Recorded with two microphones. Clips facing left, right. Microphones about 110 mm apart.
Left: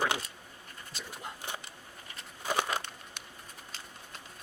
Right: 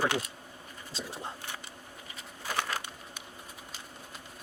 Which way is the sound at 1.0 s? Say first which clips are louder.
Right 4 dB; 30° right (ahead or behind).